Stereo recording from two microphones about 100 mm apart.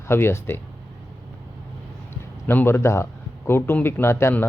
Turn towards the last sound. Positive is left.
turn(degrees=25)  # may be behind; listen again after turning